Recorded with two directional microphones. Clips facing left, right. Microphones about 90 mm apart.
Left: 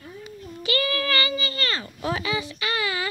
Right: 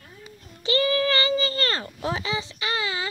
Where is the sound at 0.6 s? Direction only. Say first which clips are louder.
Right 3 dB; 25° right (ahead or behind).